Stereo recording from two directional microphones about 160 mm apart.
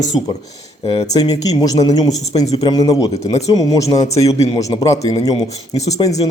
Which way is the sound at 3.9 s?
40° left (ahead or behind).